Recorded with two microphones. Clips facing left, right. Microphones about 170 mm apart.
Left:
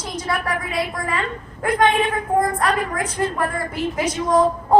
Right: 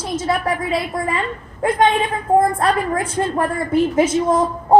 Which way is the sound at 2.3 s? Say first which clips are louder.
Right 6 dB; 25° right (ahead or behind).